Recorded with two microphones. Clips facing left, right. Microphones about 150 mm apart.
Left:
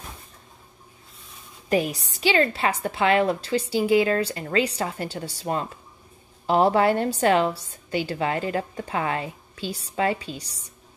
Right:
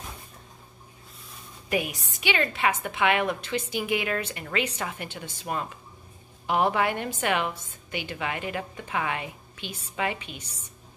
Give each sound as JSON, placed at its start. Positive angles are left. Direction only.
{"t": 1.7, "sound": "a woman's voice", "side_deg": 35}